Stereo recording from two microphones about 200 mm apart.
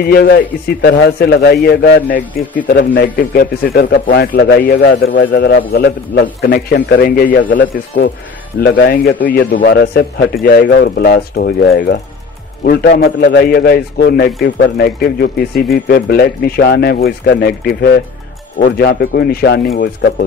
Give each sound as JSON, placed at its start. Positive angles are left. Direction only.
{"t": 0.0, "sound": "a man's voice", "side_deg": 50}
{"t": 8.5, "sound": "a man's voice", "side_deg": 55}